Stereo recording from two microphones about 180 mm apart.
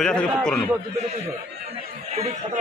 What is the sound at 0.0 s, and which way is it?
Speech, 5° left (ahead or behind).